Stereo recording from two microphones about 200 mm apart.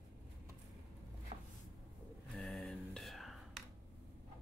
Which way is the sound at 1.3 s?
30° right (ahead or behind).